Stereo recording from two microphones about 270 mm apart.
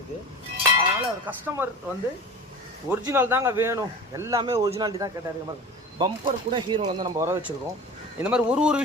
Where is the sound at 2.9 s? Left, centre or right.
Centre.